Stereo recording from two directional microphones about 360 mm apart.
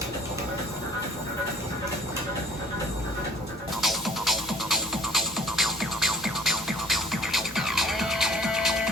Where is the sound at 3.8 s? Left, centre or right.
Centre.